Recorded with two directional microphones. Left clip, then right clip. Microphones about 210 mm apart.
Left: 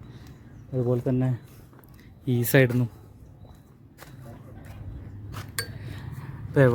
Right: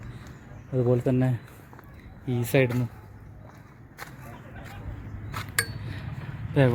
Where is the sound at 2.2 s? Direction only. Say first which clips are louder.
Left 2 dB; 40° left (ahead or behind).